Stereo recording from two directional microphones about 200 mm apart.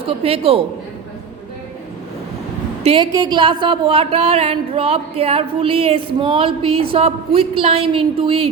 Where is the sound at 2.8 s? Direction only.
25° right (ahead or behind).